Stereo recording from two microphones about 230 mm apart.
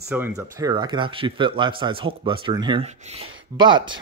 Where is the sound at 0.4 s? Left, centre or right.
Centre.